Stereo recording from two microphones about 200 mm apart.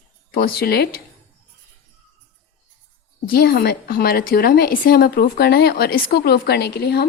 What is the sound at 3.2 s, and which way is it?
A woman's voice, 50° left (ahead or behind).